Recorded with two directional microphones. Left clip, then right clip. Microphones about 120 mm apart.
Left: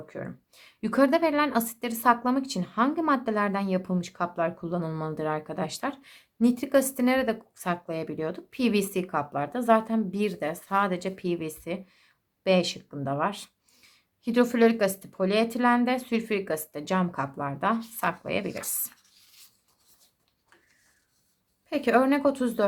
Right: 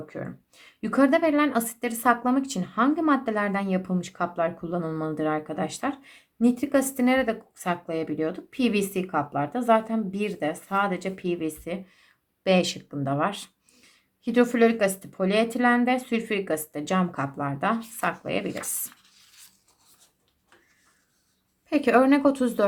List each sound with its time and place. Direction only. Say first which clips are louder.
0.0 s a woman's voice: right 2 dB; 30° left (ahead or behind)
14.3 s a woman's voice: right 1 dB; 40° left (ahead or behind)
21.7 s a woman's voice: right 3 dB; 15° left (ahead or behind)